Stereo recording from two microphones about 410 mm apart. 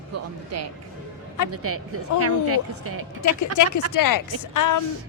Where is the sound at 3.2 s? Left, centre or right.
Left.